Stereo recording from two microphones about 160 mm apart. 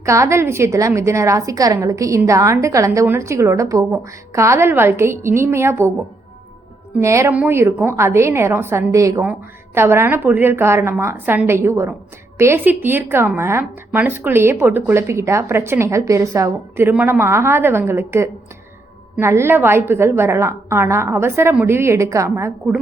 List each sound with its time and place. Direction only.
0.0 s a woman's voice: 20° right (ahead or behind)
7.0 s a woman's voice: 20° right (ahead or behind)